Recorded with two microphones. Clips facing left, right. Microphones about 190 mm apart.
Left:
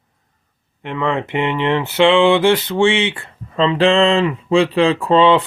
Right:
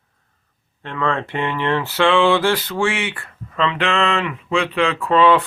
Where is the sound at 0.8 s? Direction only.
15° left (ahead or behind).